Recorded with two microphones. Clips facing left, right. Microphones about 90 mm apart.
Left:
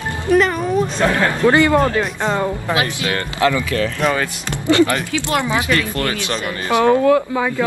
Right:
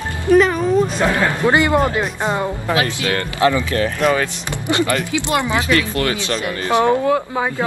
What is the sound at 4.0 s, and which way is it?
Speech, centre (ahead or behind).